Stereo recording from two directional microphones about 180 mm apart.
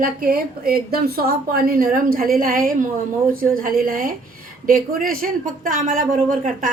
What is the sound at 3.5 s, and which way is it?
A woman's voice, 55° right (ahead or behind).